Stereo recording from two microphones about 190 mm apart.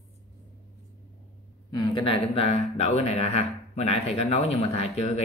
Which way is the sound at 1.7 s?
25° left (ahead or behind).